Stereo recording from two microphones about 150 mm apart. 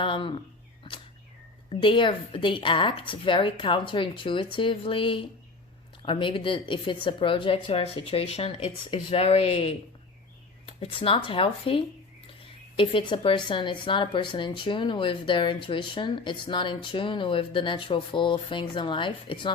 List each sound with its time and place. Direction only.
0.0 s speech: 35° left (ahead or behind)
1.7 s speech: 35° left (ahead or behind)